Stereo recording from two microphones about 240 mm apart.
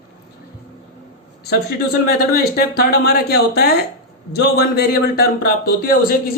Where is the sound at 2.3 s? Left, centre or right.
Left.